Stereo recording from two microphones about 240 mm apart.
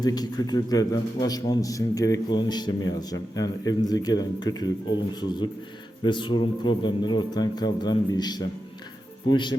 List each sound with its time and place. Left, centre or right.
0.0 s a man's voice: centre
6.0 s speech: centre